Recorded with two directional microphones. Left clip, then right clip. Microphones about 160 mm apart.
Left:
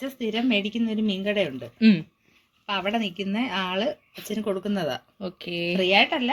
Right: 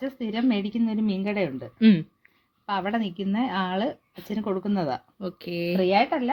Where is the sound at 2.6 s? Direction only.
40° right (ahead or behind).